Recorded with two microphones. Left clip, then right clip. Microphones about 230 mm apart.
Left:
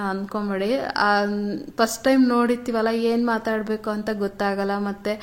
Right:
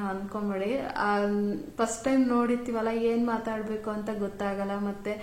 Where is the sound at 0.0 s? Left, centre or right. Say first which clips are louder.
Left 6 dB; left.